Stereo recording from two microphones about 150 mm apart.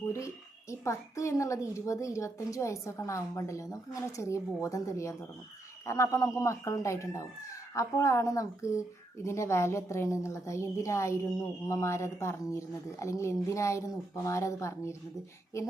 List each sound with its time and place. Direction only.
0.7 s a woman's voice: 20° left (ahead or behind)